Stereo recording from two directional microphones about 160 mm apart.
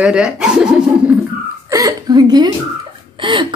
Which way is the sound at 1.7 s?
20° right (ahead or behind).